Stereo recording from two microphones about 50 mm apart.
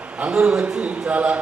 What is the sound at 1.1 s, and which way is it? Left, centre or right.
Speech, right.